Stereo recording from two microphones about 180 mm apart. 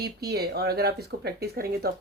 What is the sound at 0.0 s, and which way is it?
Speech, 60° right (ahead or behind).